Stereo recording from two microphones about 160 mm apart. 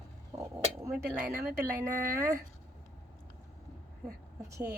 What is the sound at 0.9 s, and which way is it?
Speech, 5° right (ahead or behind).